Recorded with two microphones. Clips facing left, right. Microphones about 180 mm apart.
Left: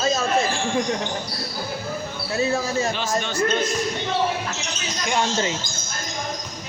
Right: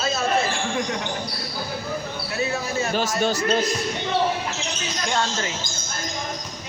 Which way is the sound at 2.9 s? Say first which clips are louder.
Right 3 dB; 40° right (ahead or behind).